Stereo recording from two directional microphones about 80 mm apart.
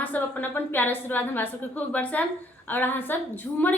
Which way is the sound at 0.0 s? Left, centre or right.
Left.